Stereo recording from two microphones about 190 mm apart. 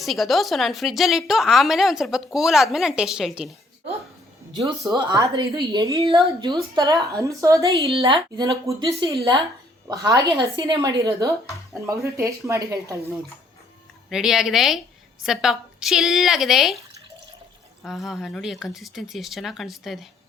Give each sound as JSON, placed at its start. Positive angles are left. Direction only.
{"t": 0.0, "sound": "a woman's voice", "side_deg": 0}
{"t": 4.8, "sound": "speech", "side_deg": -20}
{"t": 7.8, "sound": "a woman's voice", "side_deg": -30}
{"t": 8.6, "sound": "speech", "side_deg": -15}
{"t": 14.1, "sound": "a woman's voice", "side_deg": -5}
{"t": 17.8, "sound": "a woman's voice", "side_deg": 0}